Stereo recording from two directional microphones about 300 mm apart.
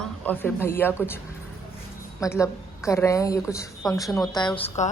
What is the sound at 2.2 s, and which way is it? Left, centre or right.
A woman's voice, centre.